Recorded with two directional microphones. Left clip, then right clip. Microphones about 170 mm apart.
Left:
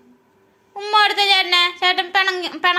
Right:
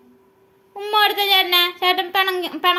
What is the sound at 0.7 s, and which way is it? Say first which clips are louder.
A child's voice: left 2 dB; 25° right (ahead or behind).